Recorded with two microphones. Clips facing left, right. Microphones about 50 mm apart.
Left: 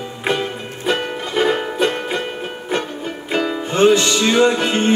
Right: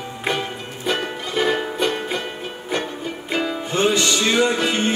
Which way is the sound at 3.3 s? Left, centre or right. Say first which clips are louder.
Left 4 dB; left.